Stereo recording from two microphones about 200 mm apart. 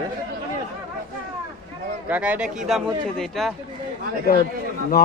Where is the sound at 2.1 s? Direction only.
5° right (ahead or behind).